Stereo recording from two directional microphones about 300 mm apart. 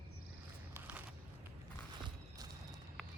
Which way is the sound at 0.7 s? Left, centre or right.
Centre.